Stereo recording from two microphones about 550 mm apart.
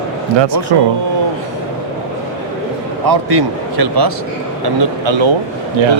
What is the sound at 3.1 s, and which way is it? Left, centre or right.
Speech, right.